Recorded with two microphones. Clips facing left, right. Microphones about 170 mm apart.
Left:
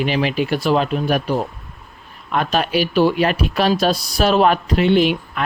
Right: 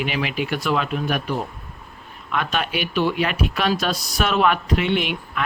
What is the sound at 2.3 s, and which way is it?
Speech, 35° left (ahead or behind).